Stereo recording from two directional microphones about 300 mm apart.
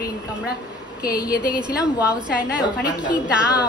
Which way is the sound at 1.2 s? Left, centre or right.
Left.